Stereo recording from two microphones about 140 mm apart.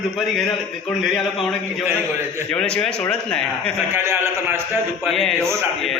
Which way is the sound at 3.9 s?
15° right (ahead or behind).